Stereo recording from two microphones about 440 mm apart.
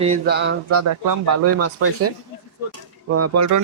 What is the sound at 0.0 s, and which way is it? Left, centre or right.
Speech, centre.